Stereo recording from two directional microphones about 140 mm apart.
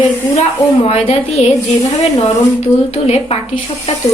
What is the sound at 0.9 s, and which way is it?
Speech, 45° left (ahead or behind).